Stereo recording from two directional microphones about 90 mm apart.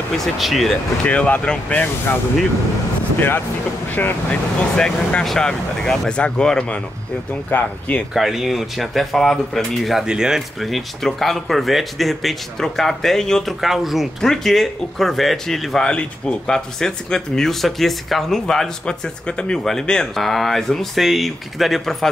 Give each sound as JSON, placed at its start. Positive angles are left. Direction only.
{"t": 0.2, "sound": "speech", "side_deg": 0}
{"t": 1.0, "sound": "speech", "side_deg": 15}
{"t": 3.2, "sound": "speech", "side_deg": 25}
{"t": 4.7, "sound": "speech", "side_deg": 10}
{"t": 7.5, "sound": "speech", "side_deg": 20}
{"t": 8.1, "sound": "speech", "side_deg": -5}